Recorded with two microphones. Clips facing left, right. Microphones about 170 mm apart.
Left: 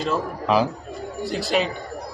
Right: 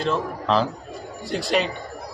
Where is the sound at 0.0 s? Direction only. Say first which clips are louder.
Even; 5° left (ahead or behind).